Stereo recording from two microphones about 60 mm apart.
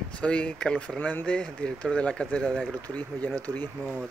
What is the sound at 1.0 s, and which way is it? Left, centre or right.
Speech, left.